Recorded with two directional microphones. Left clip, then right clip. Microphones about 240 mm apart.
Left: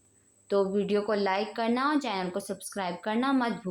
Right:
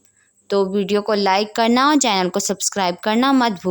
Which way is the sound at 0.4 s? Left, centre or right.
Right.